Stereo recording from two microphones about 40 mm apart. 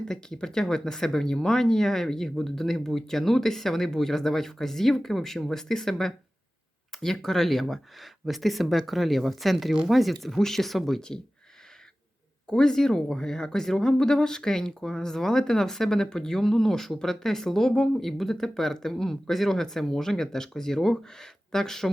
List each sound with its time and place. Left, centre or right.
0.1 s speech: centre
12.5 s speech: centre